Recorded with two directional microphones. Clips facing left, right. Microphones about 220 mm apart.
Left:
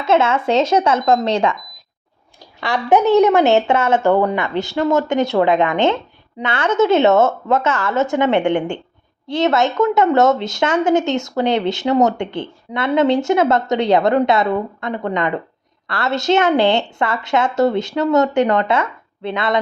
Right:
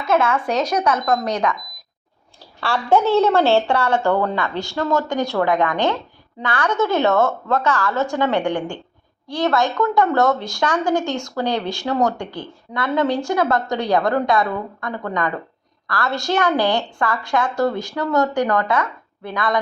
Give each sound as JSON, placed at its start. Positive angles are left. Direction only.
{"t": 0.0, "sound": "speech", "side_deg": 25}
{"t": 2.6, "sound": "speech", "side_deg": 15}